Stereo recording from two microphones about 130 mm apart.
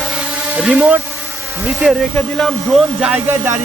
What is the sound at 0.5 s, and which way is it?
Speech, 10° right (ahead or behind).